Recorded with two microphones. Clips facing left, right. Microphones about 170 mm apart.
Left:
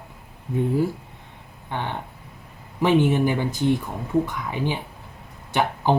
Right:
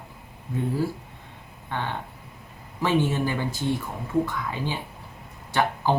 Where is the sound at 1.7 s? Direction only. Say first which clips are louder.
Left 1 dB; 15° left (ahead or behind).